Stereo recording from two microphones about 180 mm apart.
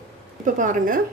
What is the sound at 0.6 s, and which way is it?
Speech, 45° right (ahead or behind).